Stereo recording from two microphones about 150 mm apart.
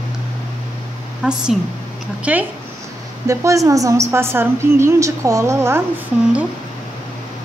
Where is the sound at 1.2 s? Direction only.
5° right (ahead or behind).